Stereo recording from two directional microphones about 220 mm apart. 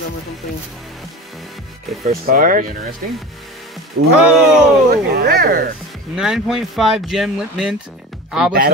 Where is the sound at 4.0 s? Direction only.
45° right (ahead or behind).